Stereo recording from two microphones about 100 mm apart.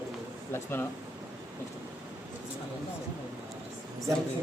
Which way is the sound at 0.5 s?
25° left (ahead or behind).